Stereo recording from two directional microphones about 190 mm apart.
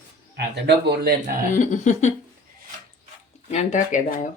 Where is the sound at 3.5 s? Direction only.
40° left (ahead or behind).